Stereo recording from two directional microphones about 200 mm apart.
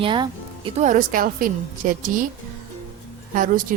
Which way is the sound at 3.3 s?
45° right (ahead or behind).